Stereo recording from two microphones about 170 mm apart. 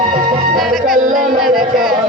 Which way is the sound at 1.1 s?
55° right (ahead or behind).